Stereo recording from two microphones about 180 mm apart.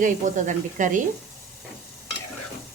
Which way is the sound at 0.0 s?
45° right (ahead or behind).